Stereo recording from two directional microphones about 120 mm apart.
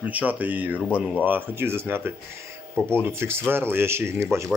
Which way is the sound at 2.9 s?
20° right (ahead or behind).